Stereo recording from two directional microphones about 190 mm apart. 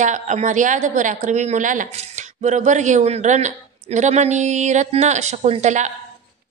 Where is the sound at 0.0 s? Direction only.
40° right (ahead or behind).